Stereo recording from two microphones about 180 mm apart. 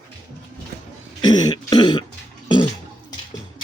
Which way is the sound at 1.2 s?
25° left (ahead or behind).